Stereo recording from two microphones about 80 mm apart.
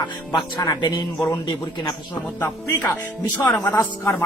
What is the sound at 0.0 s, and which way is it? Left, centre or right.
Speech, left.